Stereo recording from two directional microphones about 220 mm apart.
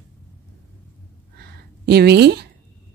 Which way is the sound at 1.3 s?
45° right (ahead or behind).